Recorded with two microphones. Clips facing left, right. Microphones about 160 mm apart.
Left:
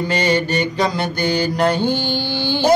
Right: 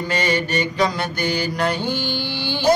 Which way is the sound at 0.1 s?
30° left (ahead or behind).